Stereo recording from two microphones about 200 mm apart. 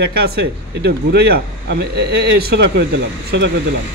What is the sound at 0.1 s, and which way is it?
Speech, 55° right (ahead or behind).